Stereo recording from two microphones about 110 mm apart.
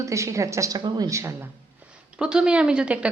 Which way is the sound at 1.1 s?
25° right (ahead or behind).